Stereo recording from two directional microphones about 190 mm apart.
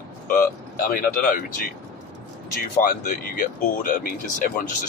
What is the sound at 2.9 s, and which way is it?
Speech, 45° left (ahead or behind).